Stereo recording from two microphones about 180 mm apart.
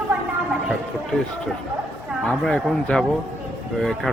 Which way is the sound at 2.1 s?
Centre (ahead or behind).